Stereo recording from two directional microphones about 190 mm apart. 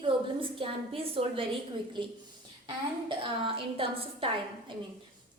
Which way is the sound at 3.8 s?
30° right (ahead or behind).